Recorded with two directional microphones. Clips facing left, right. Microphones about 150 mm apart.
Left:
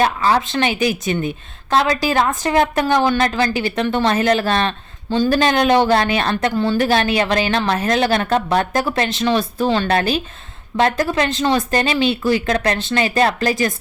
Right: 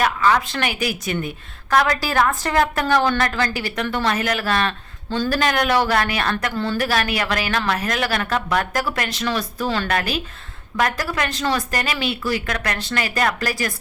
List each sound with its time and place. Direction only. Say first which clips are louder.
0.0 s speech: left 2 dB; 30° left (ahead or behind)